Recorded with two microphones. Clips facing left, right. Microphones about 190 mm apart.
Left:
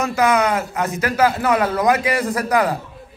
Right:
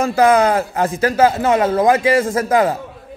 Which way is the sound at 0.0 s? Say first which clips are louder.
Right 4 dB; 30° right (ahead or behind).